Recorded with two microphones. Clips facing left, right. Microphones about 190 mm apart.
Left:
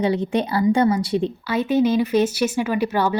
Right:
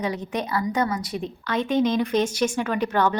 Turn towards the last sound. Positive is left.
turn(degrees=10)  # may be behind; listen again after turning